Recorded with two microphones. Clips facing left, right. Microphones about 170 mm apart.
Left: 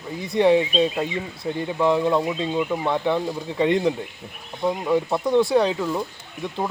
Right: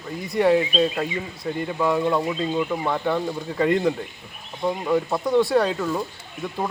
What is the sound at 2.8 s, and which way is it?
Speech, 5° left (ahead or behind).